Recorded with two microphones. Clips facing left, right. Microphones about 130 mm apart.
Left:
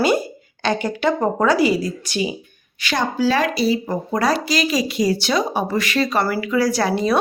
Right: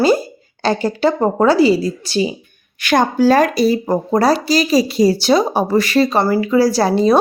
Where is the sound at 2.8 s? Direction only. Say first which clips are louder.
Right 7 dB; 50° right (ahead or behind).